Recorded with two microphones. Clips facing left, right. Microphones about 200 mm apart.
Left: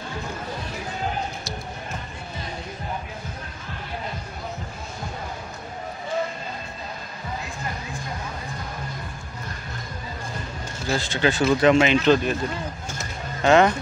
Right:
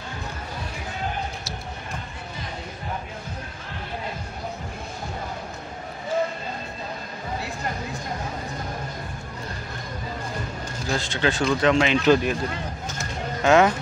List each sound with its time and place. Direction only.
10.9 s speech: 5° left (ahead or behind)
12.0 s speech: 10° right (ahead or behind)
13.4 s speech: 5° right (ahead or behind)